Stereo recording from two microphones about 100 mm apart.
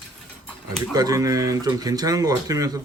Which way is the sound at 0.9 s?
40° right (ahead or behind).